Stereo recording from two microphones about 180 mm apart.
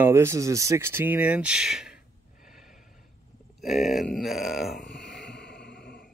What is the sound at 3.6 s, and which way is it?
Speech, centre (ahead or behind).